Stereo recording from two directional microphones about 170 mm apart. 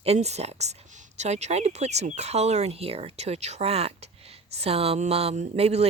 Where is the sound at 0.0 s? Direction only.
40° right (ahead or behind).